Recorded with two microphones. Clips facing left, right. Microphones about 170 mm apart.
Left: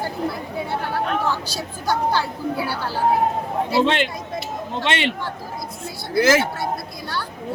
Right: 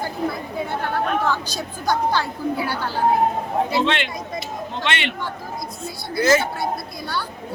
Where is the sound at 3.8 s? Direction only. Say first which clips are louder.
Left 2 dB; 40° left (ahead or behind).